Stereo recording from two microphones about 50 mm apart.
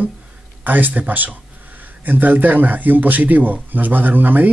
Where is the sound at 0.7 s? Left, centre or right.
Right.